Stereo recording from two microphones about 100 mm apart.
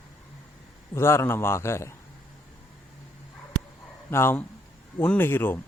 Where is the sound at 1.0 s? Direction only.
25° left (ahead or behind).